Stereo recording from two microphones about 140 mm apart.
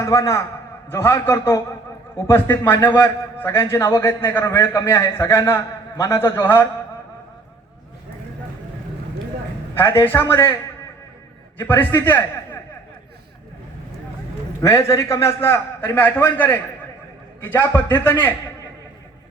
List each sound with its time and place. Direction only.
0.0 s a man's voice: 20° left (ahead or behind)
9.7 s a man's voice: 15° left (ahead or behind)
11.6 s a man's voice: 15° left (ahead or behind)
14.6 s a man's voice: 20° left (ahead or behind)